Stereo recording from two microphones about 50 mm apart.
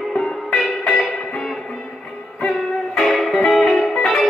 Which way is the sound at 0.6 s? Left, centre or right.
Centre.